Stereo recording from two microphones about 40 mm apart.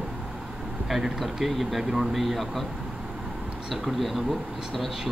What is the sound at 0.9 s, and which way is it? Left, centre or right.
Speech, centre.